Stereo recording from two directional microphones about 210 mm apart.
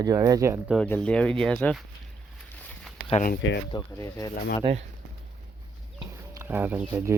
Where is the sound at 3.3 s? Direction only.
55° left (ahead or behind).